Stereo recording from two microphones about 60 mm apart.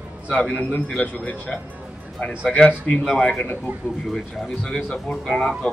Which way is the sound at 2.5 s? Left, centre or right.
Left.